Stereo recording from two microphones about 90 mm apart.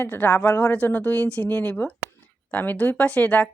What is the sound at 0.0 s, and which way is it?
A woman's voice, 25° left (ahead or behind).